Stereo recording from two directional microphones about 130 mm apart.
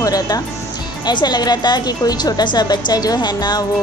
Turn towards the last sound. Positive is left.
turn(degrees=35)  # may be behind; listen again after turning